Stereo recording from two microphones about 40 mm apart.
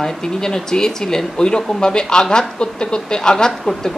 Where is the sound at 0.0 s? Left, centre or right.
Centre.